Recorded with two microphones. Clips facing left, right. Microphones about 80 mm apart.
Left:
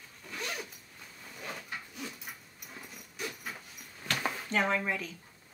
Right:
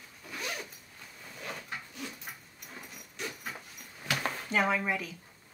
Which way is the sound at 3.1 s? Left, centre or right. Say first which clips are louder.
Even; centre.